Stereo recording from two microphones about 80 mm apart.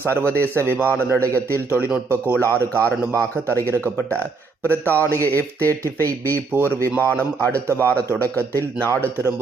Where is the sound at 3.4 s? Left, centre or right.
Left.